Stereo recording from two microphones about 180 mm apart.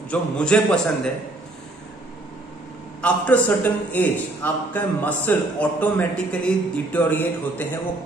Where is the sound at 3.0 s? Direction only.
10° left (ahead or behind).